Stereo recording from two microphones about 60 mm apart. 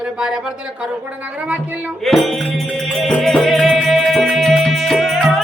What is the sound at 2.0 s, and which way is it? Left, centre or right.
Music, centre.